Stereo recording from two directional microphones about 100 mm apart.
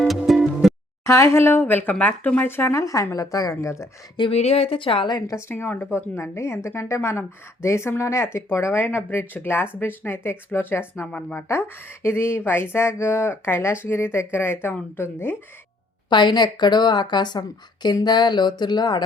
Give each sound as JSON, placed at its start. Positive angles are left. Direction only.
{"t": 0.0, "sound": "music", "side_deg": 0}
{"t": 1.0, "sound": "a woman's voice", "side_deg": 25}
{"t": 4.3, "sound": "a woman's voice", "side_deg": 90}
{"t": 5.3, "sound": "a woman's voice", "side_deg": 25}
{"t": 11.4, "sound": "a woman's voice", "side_deg": 25}
{"t": 16.0, "sound": "a woman's voice", "side_deg": 50}